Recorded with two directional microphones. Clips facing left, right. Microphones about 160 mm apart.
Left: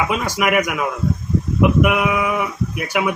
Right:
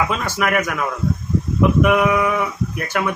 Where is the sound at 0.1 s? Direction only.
10° left (ahead or behind).